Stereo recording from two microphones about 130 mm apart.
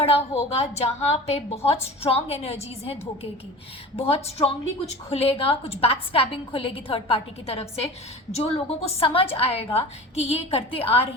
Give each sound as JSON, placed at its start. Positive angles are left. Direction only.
{"t": 0.0, "sound": "a woman's voice", "side_deg": 50}